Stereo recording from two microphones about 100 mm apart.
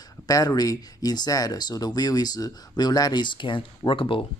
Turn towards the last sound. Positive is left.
turn(degrees=60)  # may be behind; listen again after turning